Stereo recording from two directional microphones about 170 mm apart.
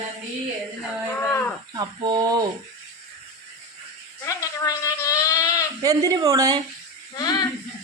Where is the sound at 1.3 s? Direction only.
15° left (ahead or behind).